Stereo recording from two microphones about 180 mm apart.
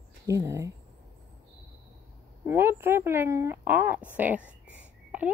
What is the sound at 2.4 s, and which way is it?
Speech, 10° right (ahead or behind).